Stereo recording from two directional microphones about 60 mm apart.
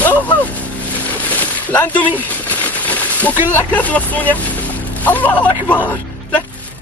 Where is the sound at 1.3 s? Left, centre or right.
Left.